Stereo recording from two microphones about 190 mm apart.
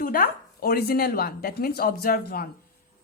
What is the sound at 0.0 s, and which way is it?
Speech, 50° left (ahead or behind).